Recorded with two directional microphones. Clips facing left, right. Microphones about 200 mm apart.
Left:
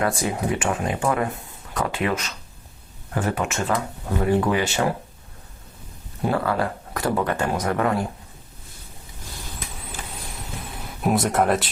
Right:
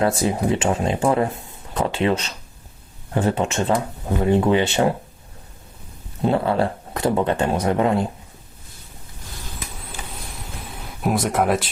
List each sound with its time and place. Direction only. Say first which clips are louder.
0.0 s speech: right 4 dB; 25° right (ahead or behind)
6.2 s speech: right 3 dB; 25° right (ahead or behind)
11.0 s speech: even; centre (ahead or behind)